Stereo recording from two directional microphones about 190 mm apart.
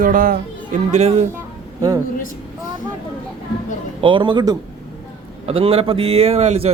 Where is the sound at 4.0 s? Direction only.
25° right (ahead or behind).